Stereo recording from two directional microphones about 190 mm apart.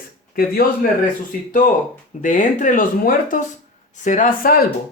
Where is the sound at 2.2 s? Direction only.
40° left (ahead or behind).